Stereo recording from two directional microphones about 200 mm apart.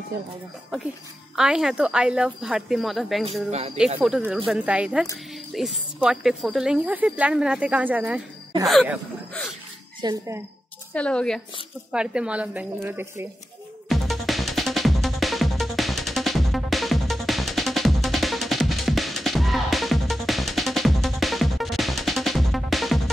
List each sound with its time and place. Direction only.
1.3 s speech: 5° right (ahead or behind)
10.0 s speech: 15° right (ahead or behind)
10.9 s speech: 5° left (ahead or behind); by 13.3 s 10° right (ahead or behind)
13.8 s music: centre (ahead or behind)